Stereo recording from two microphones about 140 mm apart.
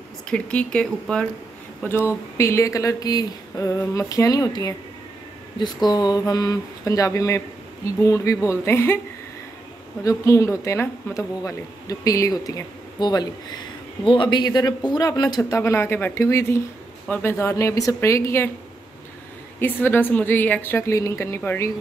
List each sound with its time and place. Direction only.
0.3 s a woman's voice: 5° left (ahead or behind); by 4.7 s 25° left (ahead or behind)
5.9 s speech: 30° left (ahead or behind)
10.0 s speech: 25° left (ahead or behind)
19.6 s a woman's voice: 15° left (ahead or behind)